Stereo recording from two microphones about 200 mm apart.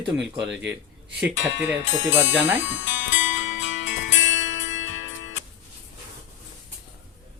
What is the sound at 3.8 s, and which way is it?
Music, 65° left (ahead or behind).